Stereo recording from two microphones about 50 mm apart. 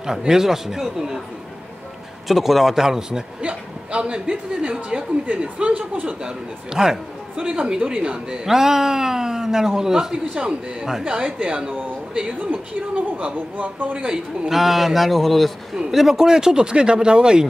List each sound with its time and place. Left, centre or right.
0.0 s speech: centre
2.2 s speech: centre; by 6.0 s right
6.0 s speech: centre
7.4 s speech: right
14.5 s speech: centre